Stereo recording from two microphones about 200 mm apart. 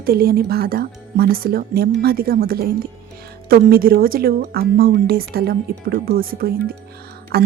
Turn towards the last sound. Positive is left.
turn(degrees=-50)  # may be behind; listen again after turning